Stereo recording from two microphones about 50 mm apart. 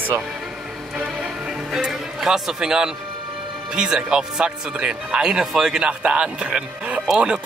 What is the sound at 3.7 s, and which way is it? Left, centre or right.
Speech, centre.